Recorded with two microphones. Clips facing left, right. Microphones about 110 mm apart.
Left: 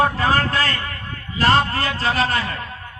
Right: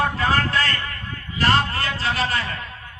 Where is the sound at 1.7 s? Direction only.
45° left (ahead or behind).